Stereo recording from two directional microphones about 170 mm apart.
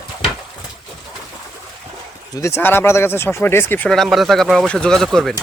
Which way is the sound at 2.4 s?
15° left (ahead or behind).